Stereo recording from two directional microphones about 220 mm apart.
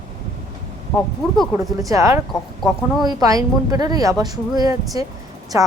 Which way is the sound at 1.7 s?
15° right (ahead or behind).